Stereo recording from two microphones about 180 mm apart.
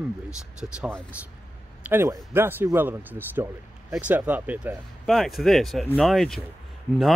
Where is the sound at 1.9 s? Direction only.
10° right (ahead or behind).